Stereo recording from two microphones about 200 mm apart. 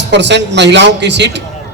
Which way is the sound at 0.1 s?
60° right (ahead or behind).